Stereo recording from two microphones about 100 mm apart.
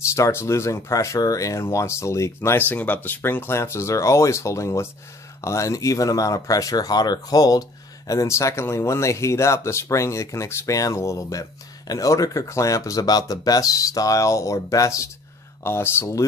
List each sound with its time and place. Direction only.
0.1 s speech: 25° left (ahead or behind)